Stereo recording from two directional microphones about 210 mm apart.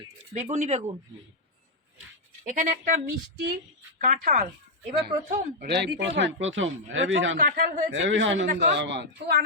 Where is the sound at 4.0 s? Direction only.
40° right (ahead or behind); by 7.4 s 65° right (ahead or behind).